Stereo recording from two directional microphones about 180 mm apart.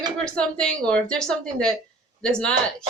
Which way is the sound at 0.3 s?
5° left (ahead or behind).